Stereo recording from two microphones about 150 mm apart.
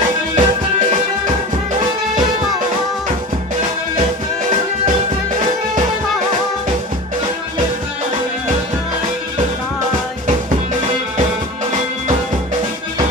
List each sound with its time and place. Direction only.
0.3 s music: 60° right (ahead or behind)